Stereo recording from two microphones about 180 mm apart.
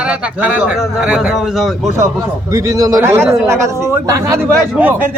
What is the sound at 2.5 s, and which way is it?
Speech, 15° right (ahead or behind).